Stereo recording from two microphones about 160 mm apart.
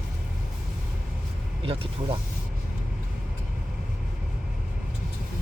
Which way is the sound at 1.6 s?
35° right (ahead or behind).